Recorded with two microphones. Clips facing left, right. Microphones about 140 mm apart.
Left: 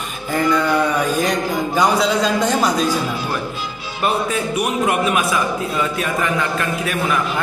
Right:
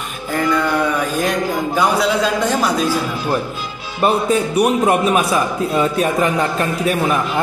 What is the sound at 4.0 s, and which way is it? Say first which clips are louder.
A man's voice: right 4 dB; 35° right (ahead or behind).